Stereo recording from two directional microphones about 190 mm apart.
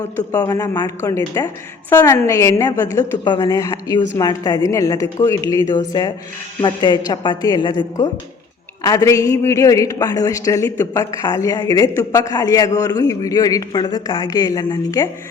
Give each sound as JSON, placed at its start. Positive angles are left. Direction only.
{"t": 0.2, "sound": "a man's voice", "side_deg": 20}